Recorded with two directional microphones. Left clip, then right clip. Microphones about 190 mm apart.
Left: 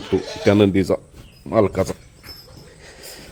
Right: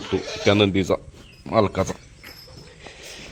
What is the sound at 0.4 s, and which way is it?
Speech, 30° left (ahead or behind).